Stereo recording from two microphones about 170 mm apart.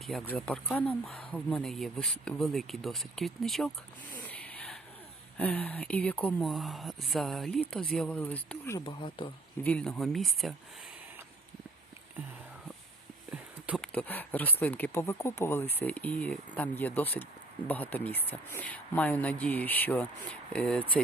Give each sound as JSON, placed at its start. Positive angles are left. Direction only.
{"t": 0.1, "sound": "speech", "side_deg": 5}
{"t": 4.1, "sound": "a sound", "side_deg": 10}
{"t": 5.4, "sound": "speech", "side_deg": 10}
{"t": 8.8, "sound": "speech", "side_deg": 30}
{"t": 9.6, "sound": "speech", "side_deg": 5}
{"t": 13.3, "sound": "a sound", "side_deg": -5}
{"t": 13.8, "sound": "speech", "side_deg": 10}